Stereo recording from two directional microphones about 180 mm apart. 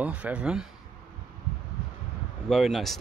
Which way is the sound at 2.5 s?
Centre (ahead or behind).